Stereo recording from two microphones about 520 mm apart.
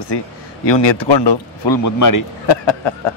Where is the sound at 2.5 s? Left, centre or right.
Left.